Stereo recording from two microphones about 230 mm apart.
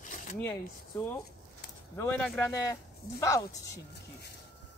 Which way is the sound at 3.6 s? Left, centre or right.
Left.